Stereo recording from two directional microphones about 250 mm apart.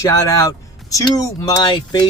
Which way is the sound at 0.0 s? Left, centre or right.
Centre.